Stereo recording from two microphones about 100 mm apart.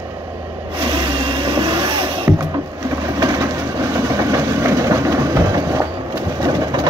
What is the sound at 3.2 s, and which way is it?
Vehicle, 35° right (ahead or behind).